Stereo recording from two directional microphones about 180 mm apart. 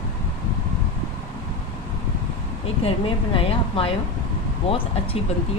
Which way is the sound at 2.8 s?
30° left (ahead or behind).